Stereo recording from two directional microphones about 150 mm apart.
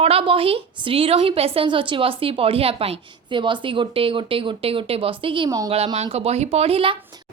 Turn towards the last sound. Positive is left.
turn(degrees=-40)  # may be behind; listen again after turning